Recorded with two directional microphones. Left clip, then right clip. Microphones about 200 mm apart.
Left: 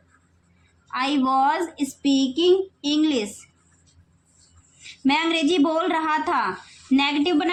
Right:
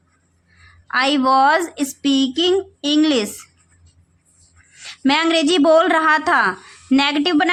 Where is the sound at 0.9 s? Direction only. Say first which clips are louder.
Right 6 dB; 50° right (ahead or behind).